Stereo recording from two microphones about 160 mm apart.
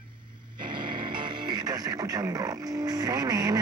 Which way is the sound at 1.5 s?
25° right (ahead or behind).